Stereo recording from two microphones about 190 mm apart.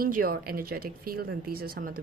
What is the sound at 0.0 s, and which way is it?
A woman's voice, 50° right (ahead or behind).